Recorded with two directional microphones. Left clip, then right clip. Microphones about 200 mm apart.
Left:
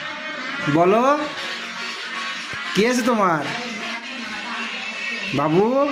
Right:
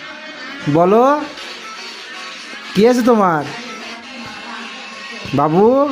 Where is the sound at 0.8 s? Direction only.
55° right (ahead or behind).